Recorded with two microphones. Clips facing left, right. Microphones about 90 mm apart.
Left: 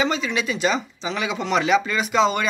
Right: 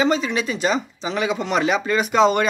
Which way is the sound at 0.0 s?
40° right (ahead or behind).